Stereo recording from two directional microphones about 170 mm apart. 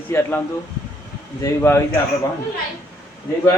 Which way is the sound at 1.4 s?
15° left (ahead or behind).